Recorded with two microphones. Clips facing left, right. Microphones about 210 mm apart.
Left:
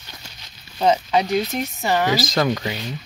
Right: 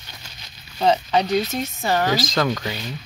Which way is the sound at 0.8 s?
5° left (ahead or behind).